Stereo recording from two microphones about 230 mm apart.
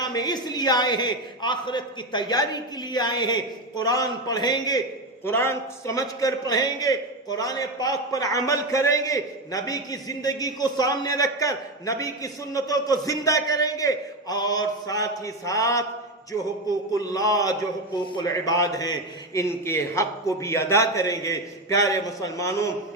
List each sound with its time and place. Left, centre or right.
0.0 s a man's voice: centre
17.0 s a man's voice: centre